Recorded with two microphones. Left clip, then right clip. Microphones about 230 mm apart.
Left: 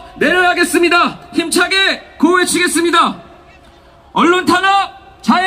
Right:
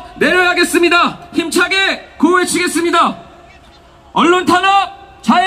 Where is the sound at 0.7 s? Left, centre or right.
Centre.